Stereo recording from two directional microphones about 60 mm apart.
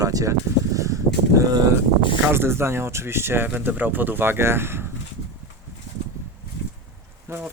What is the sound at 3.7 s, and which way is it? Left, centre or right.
Speech, right.